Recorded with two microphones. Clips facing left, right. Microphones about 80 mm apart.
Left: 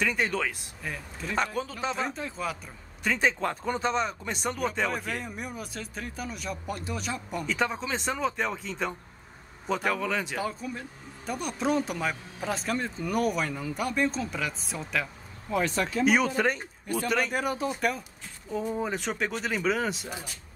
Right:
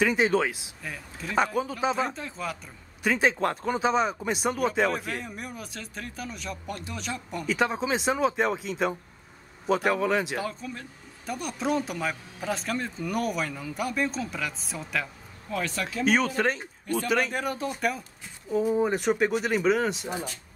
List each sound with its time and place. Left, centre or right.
0.0 s speech: centre
0.8 s speech: centre
2.0 s speech: centre
7.7 s speech: centre
10.5 s speech: centre
15.5 s speech: left
16.0 s speech: centre